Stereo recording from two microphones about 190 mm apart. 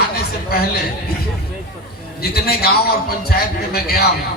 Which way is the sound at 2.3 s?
55° left (ahead or behind).